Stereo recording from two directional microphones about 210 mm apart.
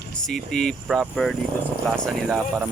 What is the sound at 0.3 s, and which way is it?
Speech, 5° left (ahead or behind).